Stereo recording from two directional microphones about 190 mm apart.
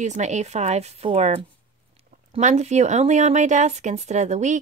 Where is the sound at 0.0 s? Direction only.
40° right (ahead or behind).